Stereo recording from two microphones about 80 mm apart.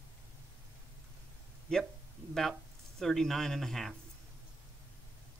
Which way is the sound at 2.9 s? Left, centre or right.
Centre.